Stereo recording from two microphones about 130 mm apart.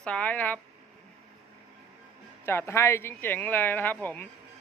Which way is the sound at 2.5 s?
20° left (ahead or behind).